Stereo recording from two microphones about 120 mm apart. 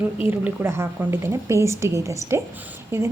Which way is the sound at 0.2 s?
15° right (ahead or behind).